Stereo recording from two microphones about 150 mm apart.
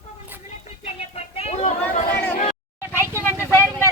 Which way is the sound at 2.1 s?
15° left (ahead or behind).